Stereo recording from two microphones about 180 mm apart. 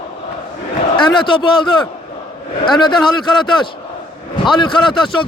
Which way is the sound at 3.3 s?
25° left (ahead or behind).